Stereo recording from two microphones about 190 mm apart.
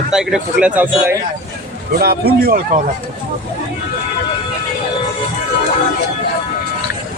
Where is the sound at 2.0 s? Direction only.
55° right (ahead or behind).